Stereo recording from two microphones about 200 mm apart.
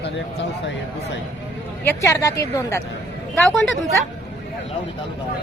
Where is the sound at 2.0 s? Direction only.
15° left (ahead or behind).